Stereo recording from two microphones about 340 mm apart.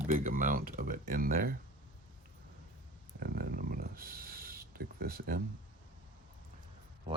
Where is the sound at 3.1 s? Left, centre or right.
Right.